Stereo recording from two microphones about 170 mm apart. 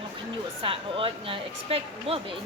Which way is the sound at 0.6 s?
30° right (ahead or behind).